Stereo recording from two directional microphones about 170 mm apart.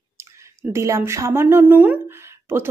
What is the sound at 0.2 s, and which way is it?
Speech, 15° right (ahead or behind).